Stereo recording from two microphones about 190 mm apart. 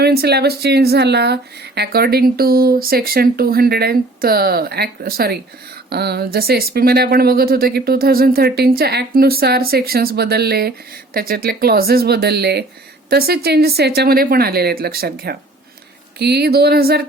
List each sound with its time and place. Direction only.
0.0 s speech: 55° right (ahead or behind)